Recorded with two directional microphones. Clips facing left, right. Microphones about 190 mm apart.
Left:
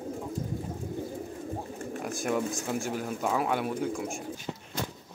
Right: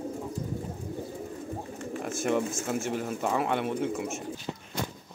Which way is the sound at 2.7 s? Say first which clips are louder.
Right 1 dB; centre (ahead or behind).